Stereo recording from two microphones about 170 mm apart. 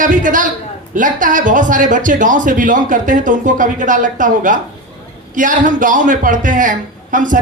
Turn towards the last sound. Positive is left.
turn(degrees=-50)  # may be behind; listen again after turning